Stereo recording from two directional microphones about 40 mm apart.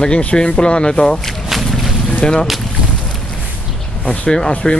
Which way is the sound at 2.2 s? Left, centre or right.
Centre.